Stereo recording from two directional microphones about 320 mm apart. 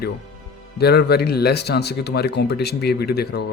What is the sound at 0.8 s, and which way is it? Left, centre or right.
Speech, left.